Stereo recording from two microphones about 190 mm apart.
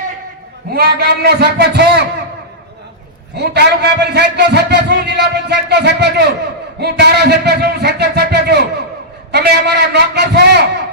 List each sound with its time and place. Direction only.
0.7 s a man's voice: 55° right (ahead or behind)
3.3 s a man's voice: 60° right (ahead or behind)